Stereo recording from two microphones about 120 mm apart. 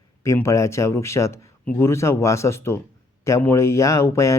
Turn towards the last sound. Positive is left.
turn(degrees=25)  # may be behind; listen again after turning